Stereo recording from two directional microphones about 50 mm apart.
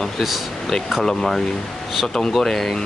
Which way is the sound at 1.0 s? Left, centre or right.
Centre.